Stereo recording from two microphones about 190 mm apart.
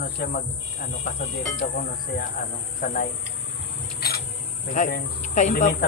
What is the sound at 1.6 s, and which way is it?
Speech, 50° left (ahead or behind).